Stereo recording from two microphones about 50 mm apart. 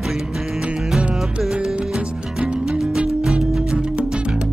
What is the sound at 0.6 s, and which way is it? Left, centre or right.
Music, centre.